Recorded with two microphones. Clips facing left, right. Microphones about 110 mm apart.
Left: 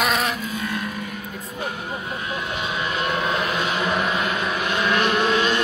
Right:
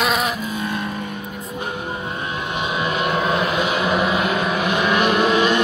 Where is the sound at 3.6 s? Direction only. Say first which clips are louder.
Right 4 dB; 10° right (ahead or behind).